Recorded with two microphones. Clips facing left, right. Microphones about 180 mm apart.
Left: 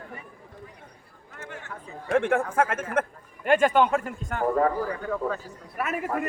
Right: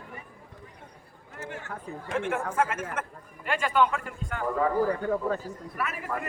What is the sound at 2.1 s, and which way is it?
A man's voice, 55° left (ahead or behind).